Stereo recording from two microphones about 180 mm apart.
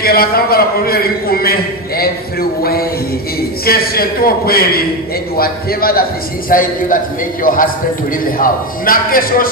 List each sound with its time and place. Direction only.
0.0 s a man's voice: 55° left (ahead or behind)
3.6 s a man's voice: 55° left (ahead or behind)